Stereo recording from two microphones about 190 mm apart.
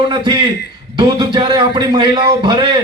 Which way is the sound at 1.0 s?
25° right (ahead or behind).